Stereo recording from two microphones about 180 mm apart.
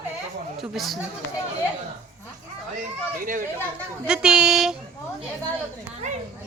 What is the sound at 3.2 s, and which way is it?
Chatter, 50° right (ahead or behind).